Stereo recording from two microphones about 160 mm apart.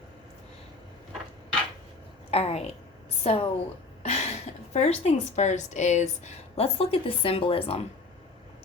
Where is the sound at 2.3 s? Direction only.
40° left (ahead or behind).